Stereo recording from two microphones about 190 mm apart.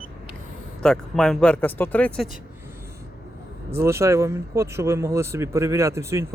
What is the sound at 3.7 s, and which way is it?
Speech, 15° right (ahead or behind).